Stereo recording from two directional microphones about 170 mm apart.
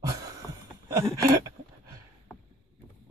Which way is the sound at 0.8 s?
15° right (ahead or behind).